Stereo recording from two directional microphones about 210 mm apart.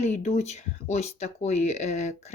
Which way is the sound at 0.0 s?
35° left (ahead or behind).